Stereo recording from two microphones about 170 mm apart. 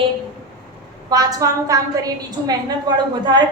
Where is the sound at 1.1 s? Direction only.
20° right (ahead or behind).